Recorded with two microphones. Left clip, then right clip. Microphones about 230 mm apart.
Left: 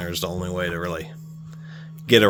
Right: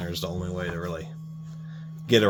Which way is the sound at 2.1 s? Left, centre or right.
Left.